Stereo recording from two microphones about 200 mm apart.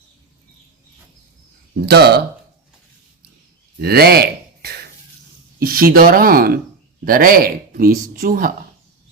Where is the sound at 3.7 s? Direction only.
50° right (ahead or behind).